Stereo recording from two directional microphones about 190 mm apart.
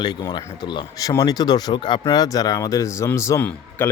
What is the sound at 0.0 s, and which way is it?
Speech, 20° left (ahead or behind).